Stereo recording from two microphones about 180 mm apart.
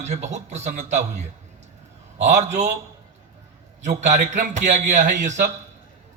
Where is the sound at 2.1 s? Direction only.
40° right (ahead or behind).